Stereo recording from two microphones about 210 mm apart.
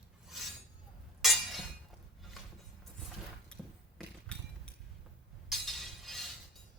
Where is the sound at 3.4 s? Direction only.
5° left (ahead or behind).